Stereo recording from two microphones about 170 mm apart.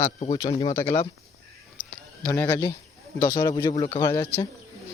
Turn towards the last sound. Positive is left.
turn(degrees=15)  # may be behind; listen again after turning